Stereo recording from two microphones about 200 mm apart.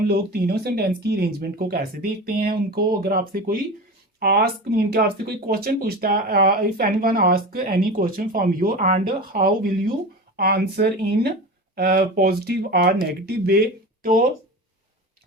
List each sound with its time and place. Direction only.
0.1 s speech: 55° right (ahead or behind)